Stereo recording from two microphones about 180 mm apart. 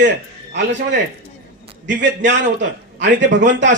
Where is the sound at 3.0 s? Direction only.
80° right.